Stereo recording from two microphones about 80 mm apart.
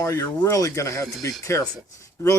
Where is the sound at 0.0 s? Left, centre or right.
Left.